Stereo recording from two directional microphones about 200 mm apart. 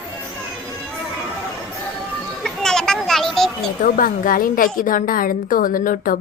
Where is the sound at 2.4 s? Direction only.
5° left (ahead or behind).